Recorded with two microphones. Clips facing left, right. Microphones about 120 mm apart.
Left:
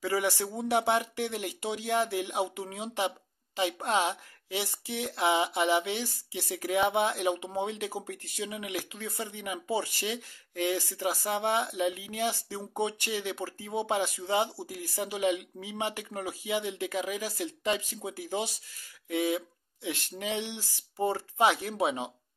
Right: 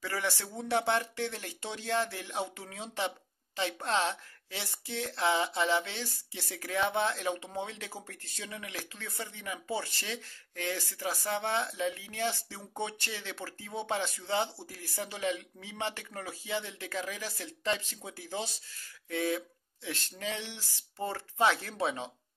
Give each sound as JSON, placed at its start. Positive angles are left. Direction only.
{"t": 0.0, "sound": "speech", "side_deg": 15}